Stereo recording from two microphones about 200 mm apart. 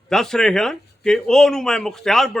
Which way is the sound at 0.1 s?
5° left (ahead or behind).